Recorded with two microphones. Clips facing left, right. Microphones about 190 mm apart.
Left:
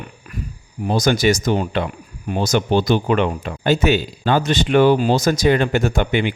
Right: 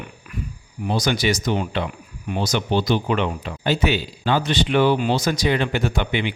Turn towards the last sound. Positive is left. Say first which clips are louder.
# left 4 dB
turn(degrees=45)  # may be behind; listen again after turning